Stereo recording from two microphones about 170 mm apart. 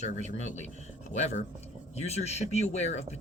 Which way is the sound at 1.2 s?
40° left (ahead or behind).